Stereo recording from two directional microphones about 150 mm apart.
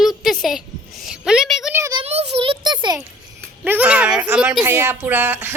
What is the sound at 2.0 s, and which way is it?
Speech, 45° right (ahead or behind).